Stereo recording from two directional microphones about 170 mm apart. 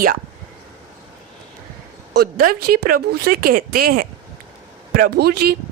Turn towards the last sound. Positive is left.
turn(degrees=-70)  # may be behind; listen again after turning